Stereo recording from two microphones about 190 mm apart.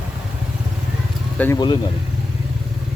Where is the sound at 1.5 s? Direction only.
25° left (ahead or behind).